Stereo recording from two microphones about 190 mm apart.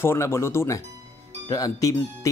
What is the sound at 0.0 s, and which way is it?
Speech, 15° left (ahead or behind).